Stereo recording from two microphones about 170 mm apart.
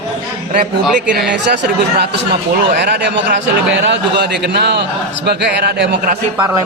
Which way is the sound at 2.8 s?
80° right.